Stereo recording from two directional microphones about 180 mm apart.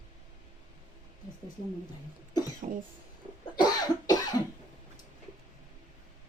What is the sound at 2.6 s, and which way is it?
Speech, 45° right (ahead or behind).